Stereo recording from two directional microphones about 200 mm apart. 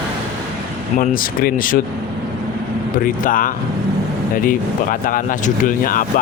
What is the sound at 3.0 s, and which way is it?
Speech, 45° left (ahead or behind).